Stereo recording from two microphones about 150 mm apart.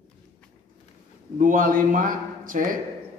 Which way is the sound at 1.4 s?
65° right (ahead or behind).